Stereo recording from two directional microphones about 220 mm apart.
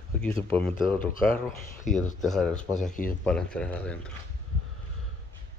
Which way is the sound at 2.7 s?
35° left (ahead or behind).